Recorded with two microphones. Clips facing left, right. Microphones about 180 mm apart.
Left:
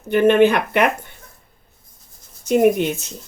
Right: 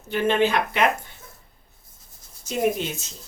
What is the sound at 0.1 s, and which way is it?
Speech, 60° left (ahead or behind).